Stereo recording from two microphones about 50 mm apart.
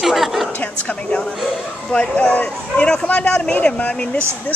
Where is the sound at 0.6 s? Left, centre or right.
Left.